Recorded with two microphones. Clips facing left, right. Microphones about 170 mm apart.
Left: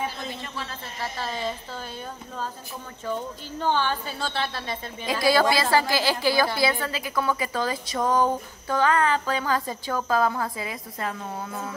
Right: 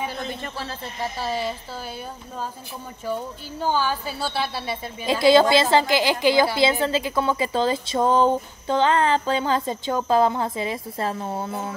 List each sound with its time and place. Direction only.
1.2 s a woman's voice: 10° right (ahead or behind)
3.1 s a woman's voice: 10° right (ahead or behind)
5.0 s a woman's voice: 25° right (ahead or behind)